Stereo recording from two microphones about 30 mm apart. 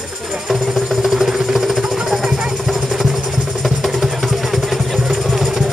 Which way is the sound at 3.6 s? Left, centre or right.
Centre.